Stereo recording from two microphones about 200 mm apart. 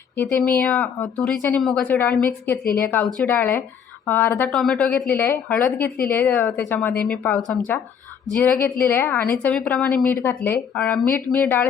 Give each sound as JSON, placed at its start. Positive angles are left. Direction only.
{"t": 0.2, "sound": "a woman's voice", "side_deg": 10}
{"t": 2.6, "sound": "a woman's voice", "side_deg": 45}
{"t": 3.2, "sound": "a woman's voice", "side_deg": 10}
{"t": 8.8, "sound": "a woman's voice", "side_deg": 10}